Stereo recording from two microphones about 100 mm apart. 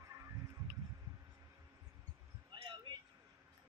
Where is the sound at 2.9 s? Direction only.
50° right (ahead or behind).